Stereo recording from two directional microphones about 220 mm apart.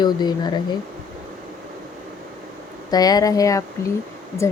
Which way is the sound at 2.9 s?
15° left (ahead or behind).